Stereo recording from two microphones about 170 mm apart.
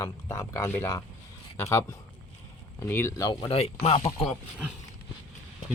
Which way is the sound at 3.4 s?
35° left (ahead or behind).